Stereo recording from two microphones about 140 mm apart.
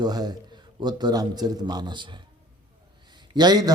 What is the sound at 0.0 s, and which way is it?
A man's voice, 30° right (ahead or behind).